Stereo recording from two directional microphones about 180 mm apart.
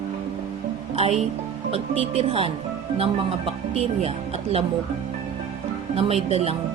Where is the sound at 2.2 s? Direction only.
30° right (ahead or behind).